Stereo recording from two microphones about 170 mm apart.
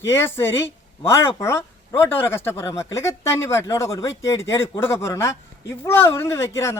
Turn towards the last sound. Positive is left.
turn(degrees=15)  # may be behind; listen again after turning